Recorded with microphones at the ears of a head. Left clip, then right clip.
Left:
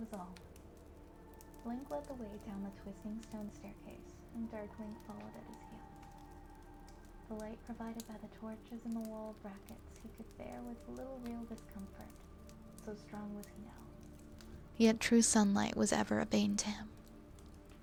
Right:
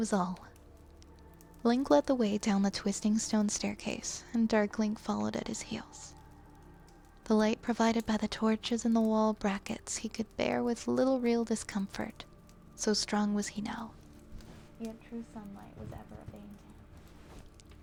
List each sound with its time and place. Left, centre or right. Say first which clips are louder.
0.0 s speech: right 16 dB; right
1.6 s speech: right 17 dB; right
7.3 s speech: right 18 dB; right
14.8 s a woman's voice: left 14 dB; left